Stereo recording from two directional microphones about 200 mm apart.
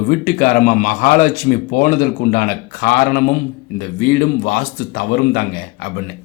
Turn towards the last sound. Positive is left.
turn(degrees=50)  # may be behind; listen again after turning